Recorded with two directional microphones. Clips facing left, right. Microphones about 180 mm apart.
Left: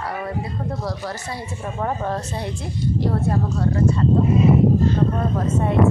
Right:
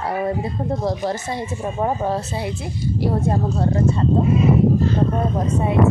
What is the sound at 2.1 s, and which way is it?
Speech, 5° right (ahead or behind).